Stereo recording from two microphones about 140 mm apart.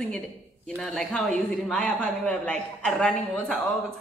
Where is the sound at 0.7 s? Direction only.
5° left (ahead or behind).